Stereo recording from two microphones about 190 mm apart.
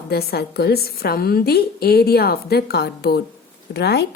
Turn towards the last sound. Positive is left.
turn(degrees=60)  # may be behind; listen again after turning